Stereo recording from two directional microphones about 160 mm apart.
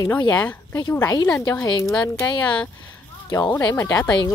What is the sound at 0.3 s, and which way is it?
Speech, 10° left (ahead or behind).